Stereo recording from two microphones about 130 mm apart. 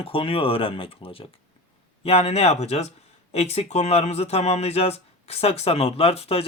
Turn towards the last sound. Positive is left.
turn(degrees=50)  # may be behind; listen again after turning